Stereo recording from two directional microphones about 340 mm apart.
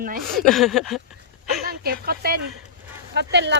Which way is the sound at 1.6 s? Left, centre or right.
Right.